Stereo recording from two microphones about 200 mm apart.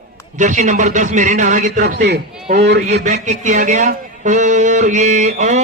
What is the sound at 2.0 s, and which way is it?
Speech, 55° right (ahead or behind).